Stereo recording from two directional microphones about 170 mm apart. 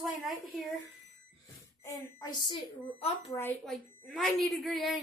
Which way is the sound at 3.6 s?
Centre (ahead or behind).